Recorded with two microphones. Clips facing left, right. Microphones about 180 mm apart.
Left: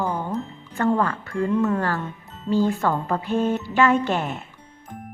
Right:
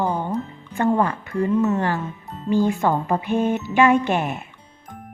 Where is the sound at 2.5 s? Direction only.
15° right (ahead or behind).